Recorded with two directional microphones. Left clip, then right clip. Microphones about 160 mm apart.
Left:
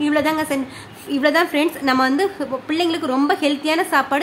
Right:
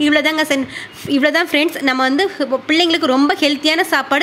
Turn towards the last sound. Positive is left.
turn(degrees=-20)  # may be behind; listen again after turning